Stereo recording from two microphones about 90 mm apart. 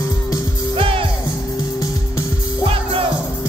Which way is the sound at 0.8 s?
90° right.